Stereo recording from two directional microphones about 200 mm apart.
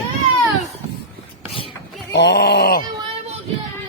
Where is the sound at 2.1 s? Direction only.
60° left (ahead or behind).